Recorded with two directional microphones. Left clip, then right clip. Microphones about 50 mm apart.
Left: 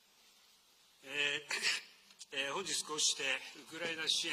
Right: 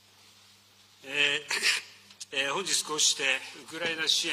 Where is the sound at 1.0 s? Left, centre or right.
Left.